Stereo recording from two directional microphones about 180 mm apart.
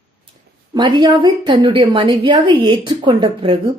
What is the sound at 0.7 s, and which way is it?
A woman's voice, 25° right (ahead or behind).